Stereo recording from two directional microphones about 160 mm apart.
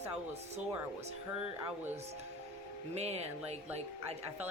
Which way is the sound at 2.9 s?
40° right (ahead or behind).